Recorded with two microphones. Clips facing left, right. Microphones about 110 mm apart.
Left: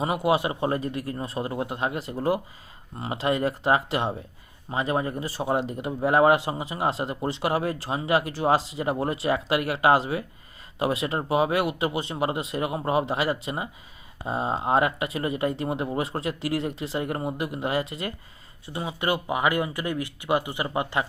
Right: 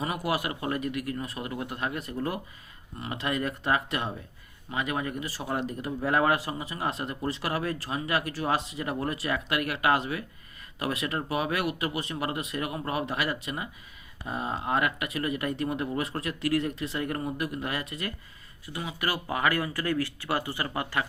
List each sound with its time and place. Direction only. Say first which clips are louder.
0.0 s speech: left 6 dB; 25° left (ahead or behind)